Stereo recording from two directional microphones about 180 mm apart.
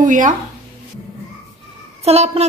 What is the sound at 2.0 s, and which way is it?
Speech, 35° right (ahead or behind).